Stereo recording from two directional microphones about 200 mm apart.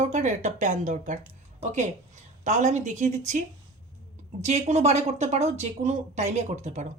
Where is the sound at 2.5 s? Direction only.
35° right (ahead or behind).